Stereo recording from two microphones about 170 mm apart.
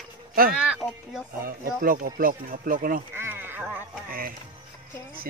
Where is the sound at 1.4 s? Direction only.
55° right (ahead or behind).